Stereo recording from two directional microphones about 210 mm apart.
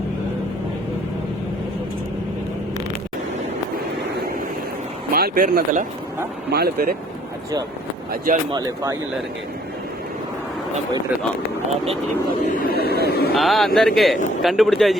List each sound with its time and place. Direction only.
5.1 s speech: 45° right (ahead or behind)
8.1 s speech: 40° right (ahead or behind)
8.5 s speech: 15° right (ahead or behind)
12.5 s speech: 40° left (ahead or behind)
13.3 s speech: centre (ahead or behind)